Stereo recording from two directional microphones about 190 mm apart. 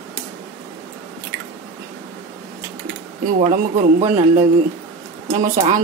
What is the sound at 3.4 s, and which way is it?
Speech, 35° right (ahead or behind).